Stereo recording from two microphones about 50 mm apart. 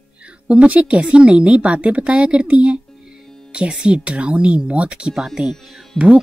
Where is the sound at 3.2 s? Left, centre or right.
Centre.